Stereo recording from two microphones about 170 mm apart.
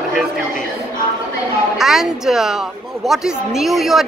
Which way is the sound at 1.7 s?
Centre (ahead or behind).